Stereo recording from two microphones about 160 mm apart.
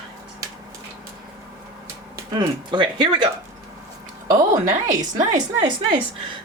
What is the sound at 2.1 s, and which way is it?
Speech, 30° right (ahead or behind).